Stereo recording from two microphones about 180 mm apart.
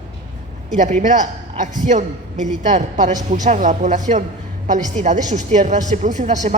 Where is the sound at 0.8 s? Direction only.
40° right (ahead or behind).